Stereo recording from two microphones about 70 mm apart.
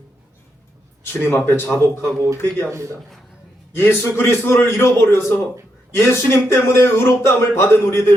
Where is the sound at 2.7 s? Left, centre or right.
Right.